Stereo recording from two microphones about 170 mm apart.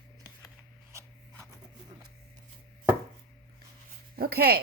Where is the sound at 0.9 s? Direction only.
15° right (ahead or behind).